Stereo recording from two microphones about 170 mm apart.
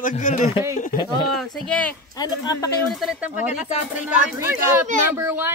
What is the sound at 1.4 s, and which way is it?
Speech, 5° left (ahead or behind).